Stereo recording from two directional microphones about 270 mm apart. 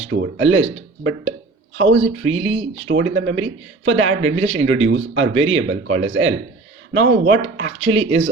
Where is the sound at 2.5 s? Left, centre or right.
Centre.